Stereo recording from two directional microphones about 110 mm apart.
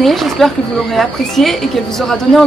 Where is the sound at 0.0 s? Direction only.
Centre (ahead or behind).